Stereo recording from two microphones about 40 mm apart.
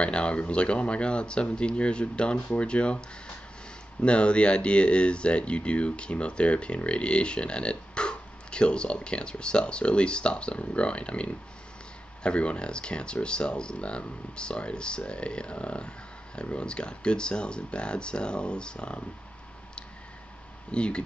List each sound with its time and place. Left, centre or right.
0.0 s speech: left
4.0 s speech: left
20.7 s speech: left